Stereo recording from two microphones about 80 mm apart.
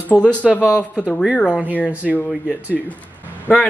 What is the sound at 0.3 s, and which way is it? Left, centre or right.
Speech, centre.